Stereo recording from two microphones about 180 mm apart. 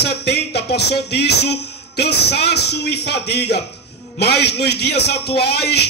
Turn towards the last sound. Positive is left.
turn(degrees=65)  # may be behind; listen again after turning